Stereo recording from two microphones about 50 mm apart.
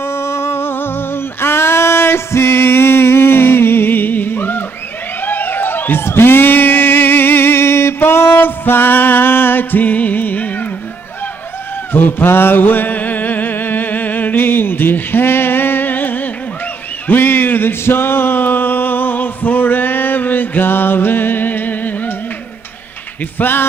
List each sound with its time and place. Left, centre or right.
0.0 s humming: left
5.2 s a sound: left
8.0 s music: left
11.9 s music: left
17.1 s a sound: left
23.4 s speech: left